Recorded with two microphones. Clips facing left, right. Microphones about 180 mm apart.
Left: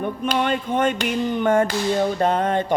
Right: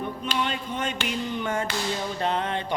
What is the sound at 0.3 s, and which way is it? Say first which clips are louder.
Music: left 8 dB; 55° left (ahead or behind).